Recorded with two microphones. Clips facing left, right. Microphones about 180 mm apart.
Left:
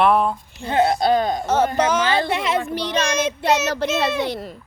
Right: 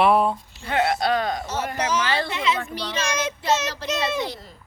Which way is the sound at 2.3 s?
55° left (ahead or behind).